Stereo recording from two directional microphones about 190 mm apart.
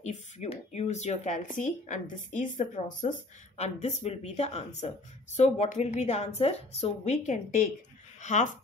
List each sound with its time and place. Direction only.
0.0 s speech: 35° left (ahead or behind)